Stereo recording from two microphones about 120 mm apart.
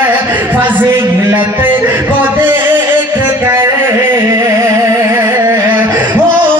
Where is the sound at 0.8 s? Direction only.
25° right (ahead or behind).